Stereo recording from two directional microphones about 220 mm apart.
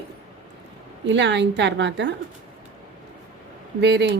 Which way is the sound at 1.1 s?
55° right (ahead or behind).